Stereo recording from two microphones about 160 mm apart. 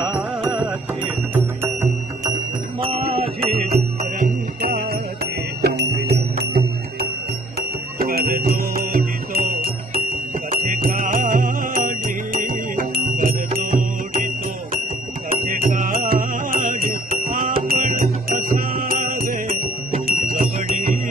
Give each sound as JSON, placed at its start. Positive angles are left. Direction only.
{"t": 0.0, "sound": "music", "side_deg": 0}
{"t": 2.8, "sound": "music", "side_deg": -35}
{"t": 4.2, "sound": "music", "side_deg": -65}
{"t": 8.0, "sound": "music", "side_deg": -70}